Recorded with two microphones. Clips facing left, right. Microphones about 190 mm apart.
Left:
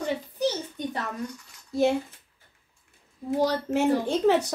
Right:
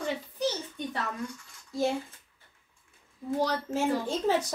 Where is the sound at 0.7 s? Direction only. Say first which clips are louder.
Left 3 dB; 40° left (ahead or behind).